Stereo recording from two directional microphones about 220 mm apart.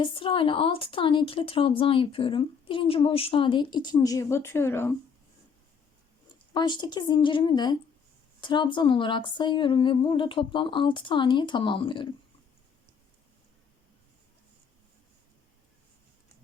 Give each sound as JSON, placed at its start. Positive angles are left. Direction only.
{"t": 0.0, "sound": "speech", "side_deg": 25}
{"t": 6.5, "sound": "speech", "side_deg": 20}